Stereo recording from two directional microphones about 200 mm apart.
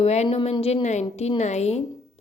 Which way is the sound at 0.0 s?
35° left (ahead or behind).